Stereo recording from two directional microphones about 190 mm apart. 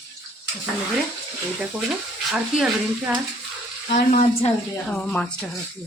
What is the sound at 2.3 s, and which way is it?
Speech, centre (ahead or behind).